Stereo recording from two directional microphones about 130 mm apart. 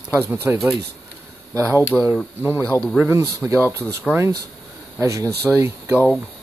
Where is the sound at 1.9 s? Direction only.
5° left (ahead or behind).